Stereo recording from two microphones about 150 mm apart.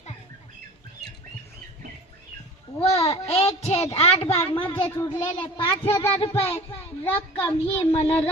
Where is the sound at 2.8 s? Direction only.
45° left (ahead or behind).